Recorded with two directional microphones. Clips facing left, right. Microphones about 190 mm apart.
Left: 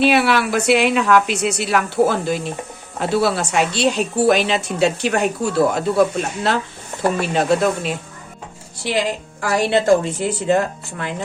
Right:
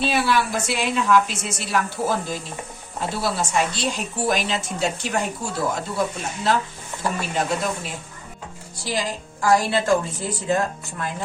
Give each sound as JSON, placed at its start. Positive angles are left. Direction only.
{"t": 0.0, "sound": "a woman's voice", "side_deg": 65}